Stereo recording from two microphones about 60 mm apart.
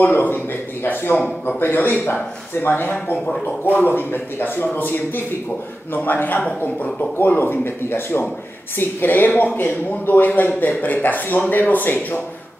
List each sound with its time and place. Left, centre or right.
0.0 s a man's voice: left